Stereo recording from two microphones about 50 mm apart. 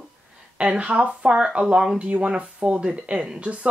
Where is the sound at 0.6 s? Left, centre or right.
Right.